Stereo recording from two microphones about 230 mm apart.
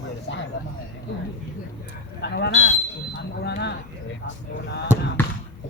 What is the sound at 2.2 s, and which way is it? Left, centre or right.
Speech, left.